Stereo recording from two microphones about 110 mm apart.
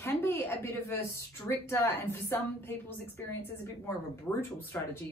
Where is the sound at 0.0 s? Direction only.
20° left (ahead or behind).